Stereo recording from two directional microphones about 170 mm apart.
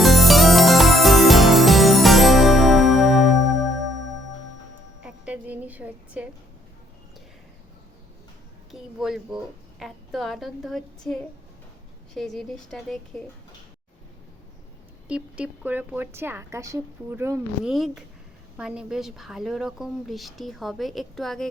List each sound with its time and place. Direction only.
0.0 s music: centre (ahead or behind)
5.0 s music: 5° right (ahead or behind)
8.7 s speech: 5° right (ahead or behind)
15.0 s a woman's voice: 5° right (ahead or behind)
17.7 s speech: centre (ahead or behind)